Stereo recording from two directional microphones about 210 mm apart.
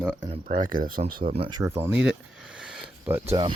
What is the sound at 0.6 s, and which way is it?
Speech, 40° right (ahead or behind).